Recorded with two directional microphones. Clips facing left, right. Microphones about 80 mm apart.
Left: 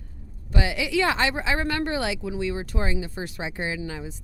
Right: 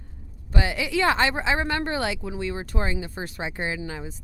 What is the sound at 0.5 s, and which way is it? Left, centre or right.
Speech, right.